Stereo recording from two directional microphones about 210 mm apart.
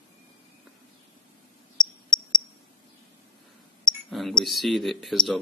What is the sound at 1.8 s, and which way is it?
Cricket, 20° left (ahead or behind).